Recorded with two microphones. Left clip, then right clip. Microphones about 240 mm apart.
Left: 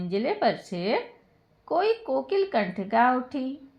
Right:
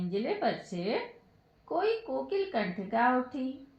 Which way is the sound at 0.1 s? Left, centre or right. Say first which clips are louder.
Left 6 dB; left.